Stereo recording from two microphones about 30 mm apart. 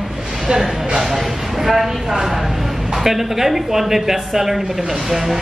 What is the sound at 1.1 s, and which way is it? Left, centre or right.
A woman's voice, centre.